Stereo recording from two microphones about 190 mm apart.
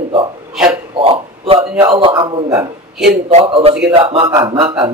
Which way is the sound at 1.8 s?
25° right (ahead or behind).